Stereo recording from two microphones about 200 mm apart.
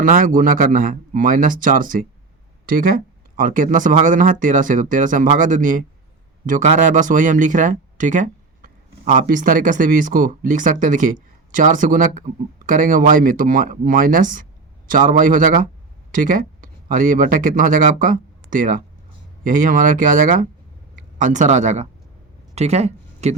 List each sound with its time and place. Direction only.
0.0 s speech: 40° right (ahead or behind)